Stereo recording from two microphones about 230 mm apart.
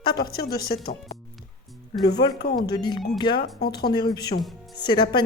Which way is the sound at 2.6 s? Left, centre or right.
Centre.